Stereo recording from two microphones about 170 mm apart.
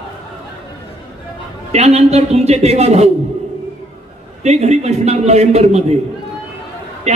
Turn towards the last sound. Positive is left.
turn(degrees=-40)  # may be behind; listen again after turning